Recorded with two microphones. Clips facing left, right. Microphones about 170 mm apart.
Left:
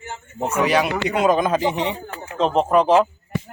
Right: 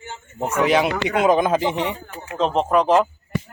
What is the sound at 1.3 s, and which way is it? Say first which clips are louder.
Speech: right 1 dB; 20° right (ahead or behind).